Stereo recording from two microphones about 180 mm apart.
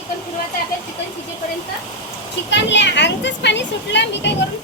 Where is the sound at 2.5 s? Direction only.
80° left.